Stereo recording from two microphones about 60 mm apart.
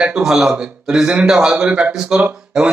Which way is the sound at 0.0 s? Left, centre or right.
Centre.